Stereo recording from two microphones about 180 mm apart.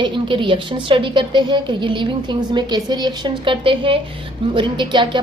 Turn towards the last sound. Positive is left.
turn(degrees=-25)  # may be behind; listen again after turning